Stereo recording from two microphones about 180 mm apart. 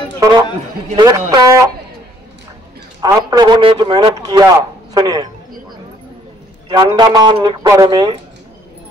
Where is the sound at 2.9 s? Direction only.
20° right (ahead or behind).